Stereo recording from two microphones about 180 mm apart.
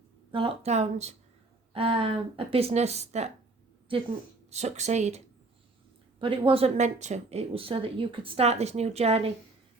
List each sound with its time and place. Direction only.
0.3 s speech: 30° right (ahead or behind)
4.5 s speech: 40° right (ahead or behind)
6.1 s speech: 30° right (ahead or behind)